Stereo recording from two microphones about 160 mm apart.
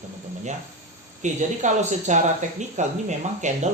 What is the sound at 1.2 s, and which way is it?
Speech, 50° right (ahead or behind).